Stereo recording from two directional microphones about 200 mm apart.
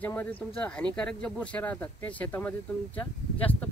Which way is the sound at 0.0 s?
10° left (ahead or behind).